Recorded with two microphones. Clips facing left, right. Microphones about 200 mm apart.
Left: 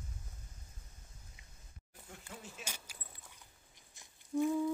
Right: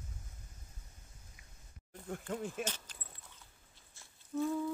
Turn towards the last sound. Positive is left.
turn(degrees=15)  # may be behind; listen again after turning